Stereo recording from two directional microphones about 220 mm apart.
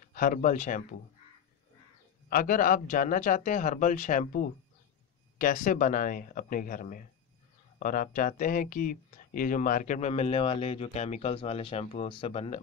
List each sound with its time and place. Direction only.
0.1 s a man's voice: 40° left (ahead or behind)
2.2 s a man's voice: 40° left (ahead or behind)